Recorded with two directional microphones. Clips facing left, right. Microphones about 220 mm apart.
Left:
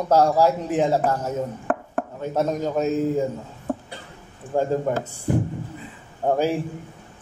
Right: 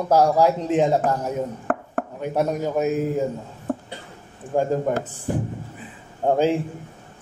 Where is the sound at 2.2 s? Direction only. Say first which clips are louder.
Right 1 dB; 10° right (ahead or behind).